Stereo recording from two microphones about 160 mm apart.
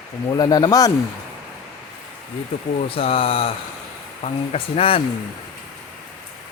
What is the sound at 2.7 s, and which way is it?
Speech, 35° left (ahead or behind).